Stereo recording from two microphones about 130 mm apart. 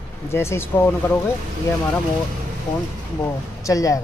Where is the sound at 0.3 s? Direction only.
20° left (ahead or behind).